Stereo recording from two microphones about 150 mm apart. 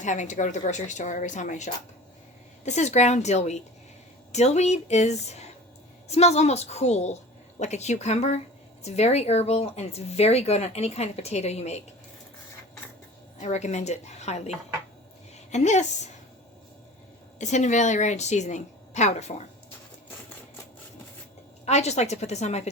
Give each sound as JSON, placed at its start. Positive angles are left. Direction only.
{"t": 0.0, "sound": "a woman's voice", "side_deg": 55}
{"t": 13.4, "sound": "speech", "side_deg": 50}
{"t": 15.5, "sound": "speech", "side_deg": 50}
{"t": 17.3, "sound": "speech", "side_deg": 50}
{"t": 21.6, "sound": "speech", "side_deg": 45}